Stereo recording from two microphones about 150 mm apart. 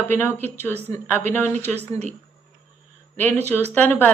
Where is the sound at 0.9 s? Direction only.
15° left (ahead or behind).